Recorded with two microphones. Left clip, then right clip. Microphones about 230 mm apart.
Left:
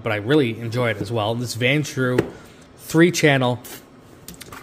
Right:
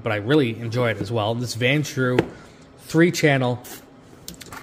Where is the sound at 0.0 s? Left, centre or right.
Centre.